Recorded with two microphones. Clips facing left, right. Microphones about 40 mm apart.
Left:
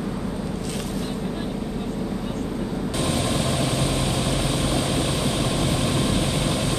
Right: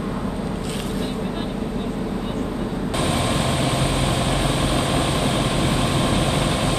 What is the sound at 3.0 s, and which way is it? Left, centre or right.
Vehicle, right.